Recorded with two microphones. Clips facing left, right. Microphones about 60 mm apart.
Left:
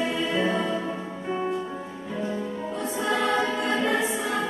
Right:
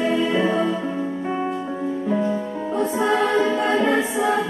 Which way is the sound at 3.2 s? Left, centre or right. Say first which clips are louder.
Right 5 dB; centre.